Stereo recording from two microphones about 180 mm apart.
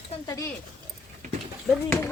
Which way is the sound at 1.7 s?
5° left (ahead or behind).